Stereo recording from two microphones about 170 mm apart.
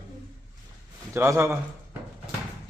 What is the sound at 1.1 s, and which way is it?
Speech, 15° right (ahead or behind).